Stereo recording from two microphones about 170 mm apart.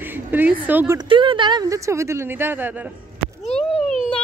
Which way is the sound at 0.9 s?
30° right (ahead or behind).